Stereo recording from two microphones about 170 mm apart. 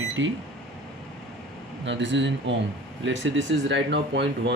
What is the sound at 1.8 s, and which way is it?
Speech, 90° right.